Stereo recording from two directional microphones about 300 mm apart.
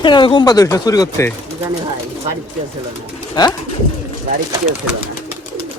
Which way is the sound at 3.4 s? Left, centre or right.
Centre.